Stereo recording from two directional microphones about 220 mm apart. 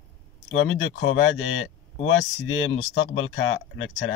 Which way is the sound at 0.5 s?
65° left (ahead or behind).